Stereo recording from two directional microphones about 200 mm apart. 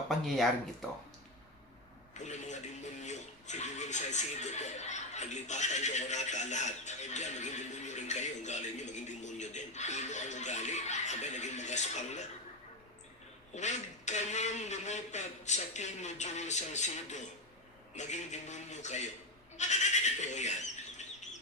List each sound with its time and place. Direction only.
0.1 s speech: centre (ahead or behind)
2.2 s a sound: 35° left (ahead or behind)
3.0 s television: 35° left (ahead or behind)
13.5 s a man's voice: 35° left (ahead or behind)